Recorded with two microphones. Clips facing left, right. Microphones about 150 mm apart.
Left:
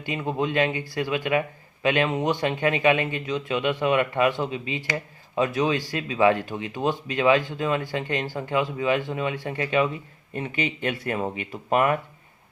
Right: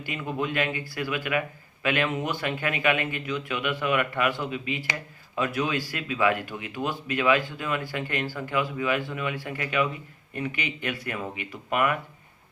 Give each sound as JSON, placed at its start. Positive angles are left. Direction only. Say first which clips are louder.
{"t": 0.0, "sound": "a man's voice", "louder": "left 4 dB", "side_deg": 25}